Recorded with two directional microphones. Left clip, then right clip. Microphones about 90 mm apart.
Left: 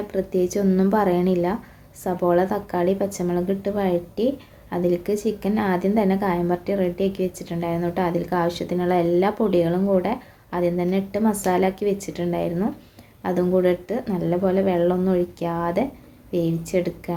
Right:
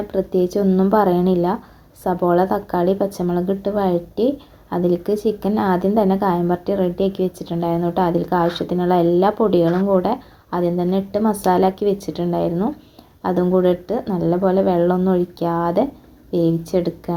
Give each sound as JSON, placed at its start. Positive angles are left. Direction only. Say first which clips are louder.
{"t": 0.1, "sound": "a woman's voice", "louder": "right 4 dB", "side_deg": -35}
{"t": 0.7, "sound": "a woman's voice", "louder": "right 3 dB", "side_deg": -20}
{"t": 0.9, "sound": "a woman's voice", "louder": "right 5 dB", "side_deg": -35}